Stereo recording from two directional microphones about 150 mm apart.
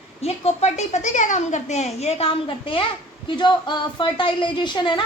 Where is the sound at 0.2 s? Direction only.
45° left (ahead or behind).